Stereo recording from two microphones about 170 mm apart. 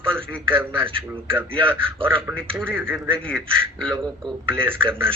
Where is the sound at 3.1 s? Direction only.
5° left (ahead or behind).